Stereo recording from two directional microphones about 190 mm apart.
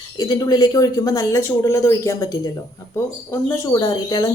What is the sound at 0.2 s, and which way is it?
Speech, 20° left (ahead or behind).